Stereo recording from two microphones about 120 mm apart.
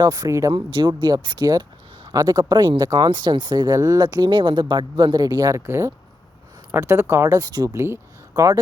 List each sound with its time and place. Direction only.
0.0 s speech: 35° right (ahead or behind)
0.5 s speech: 40° right (ahead or behind)